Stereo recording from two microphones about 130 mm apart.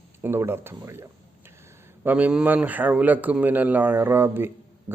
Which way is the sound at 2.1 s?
10° right (ahead or behind).